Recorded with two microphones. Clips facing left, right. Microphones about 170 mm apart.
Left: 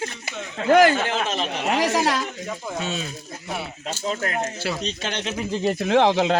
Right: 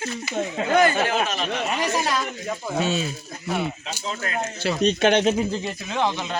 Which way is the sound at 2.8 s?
Centre (ahead or behind).